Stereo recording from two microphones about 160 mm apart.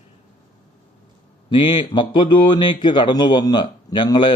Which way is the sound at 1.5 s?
30° left (ahead or behind).